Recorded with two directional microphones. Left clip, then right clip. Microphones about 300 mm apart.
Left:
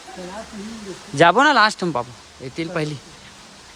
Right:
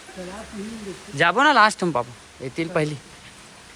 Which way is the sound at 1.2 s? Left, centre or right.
Centre.